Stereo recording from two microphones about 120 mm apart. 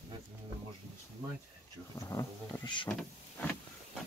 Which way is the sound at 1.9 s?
25° left (ahead or behind).